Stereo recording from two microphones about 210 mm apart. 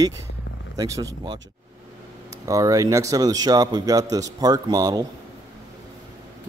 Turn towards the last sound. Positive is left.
turn(degrees=-15)  # may be behind; listen again after turning